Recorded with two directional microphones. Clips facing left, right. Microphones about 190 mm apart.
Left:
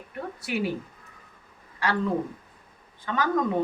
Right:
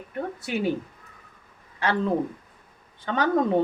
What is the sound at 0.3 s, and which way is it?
Speech, 25° right (ahead or behind).